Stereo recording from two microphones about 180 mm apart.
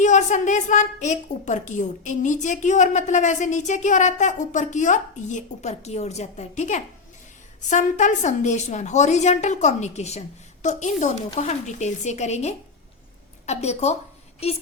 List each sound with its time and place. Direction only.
0.0 s a woman's voice: 40° left (ahead or behind)